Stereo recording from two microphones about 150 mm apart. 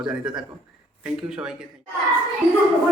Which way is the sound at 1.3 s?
5° right (ahead or behind).